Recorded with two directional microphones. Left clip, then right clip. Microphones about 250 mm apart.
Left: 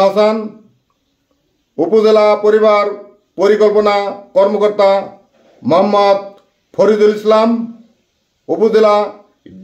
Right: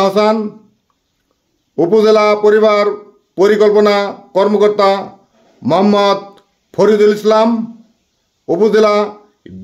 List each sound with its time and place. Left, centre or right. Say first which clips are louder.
0.0 s a man's voice: left 1 dB; right
1.8 s a man's voice: even; right